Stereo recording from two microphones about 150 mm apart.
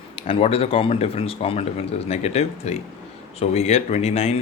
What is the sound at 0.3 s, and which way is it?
A man's voice, 40° left (ahead or behind).